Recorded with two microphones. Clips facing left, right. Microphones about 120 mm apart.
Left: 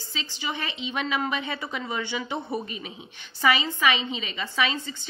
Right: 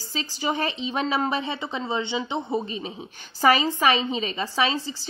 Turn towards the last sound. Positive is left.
turn(degrees=-35)  # may be behind; listen again after turning